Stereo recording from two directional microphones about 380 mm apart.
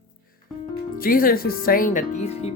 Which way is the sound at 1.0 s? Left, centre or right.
Left.